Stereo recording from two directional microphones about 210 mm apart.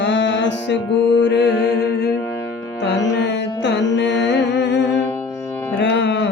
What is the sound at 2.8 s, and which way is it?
Music, 55° left (ahead or behind).